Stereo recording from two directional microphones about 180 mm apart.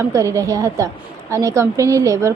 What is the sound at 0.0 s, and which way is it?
A woman's voice, 15° right (ahead or behind).